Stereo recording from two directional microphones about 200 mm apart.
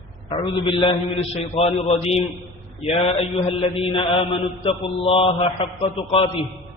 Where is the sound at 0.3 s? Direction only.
25° left (ahead or behind).